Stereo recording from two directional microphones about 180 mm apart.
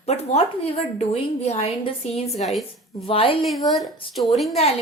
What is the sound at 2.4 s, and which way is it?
Speech, centre (ahead or behind).